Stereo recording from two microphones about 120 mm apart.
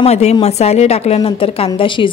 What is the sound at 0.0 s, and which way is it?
A woman's voice, 65° left (ahead or behind).